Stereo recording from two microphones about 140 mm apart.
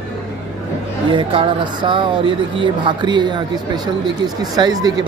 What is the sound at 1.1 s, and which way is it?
A man's voice, 35° right (ahead or behind).